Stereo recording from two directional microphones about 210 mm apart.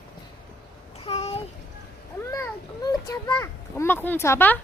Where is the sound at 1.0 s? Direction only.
30° left (ahead or behind).